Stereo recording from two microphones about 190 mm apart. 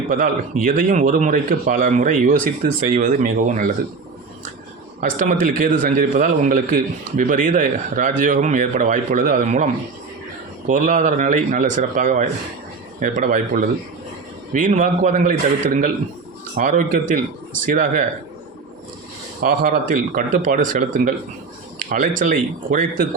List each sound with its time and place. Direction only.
0.1 s a man's voice: 45° right (ahead or behind)
4.9 s a man's voice: 45° right (ahead or behind)
10.7 s a man's voice: 40° right (ahead or behind)
19.4 s a man's voice: 50° right (ahead or behind)